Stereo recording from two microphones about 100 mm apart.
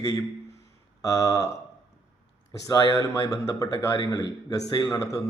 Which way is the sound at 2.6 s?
35° left (ahead or behind).